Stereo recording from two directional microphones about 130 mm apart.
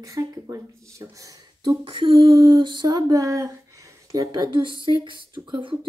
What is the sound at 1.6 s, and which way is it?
Speech, 40° right (ahead or behind).